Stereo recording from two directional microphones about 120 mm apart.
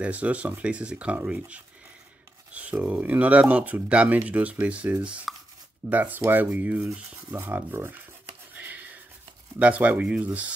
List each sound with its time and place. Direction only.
0.0 s speech: 10° right (ahead or behind)
8.5 s a sound: 15° right (ahead or behind)
9.6 s speech: 10° right (ahead or behind)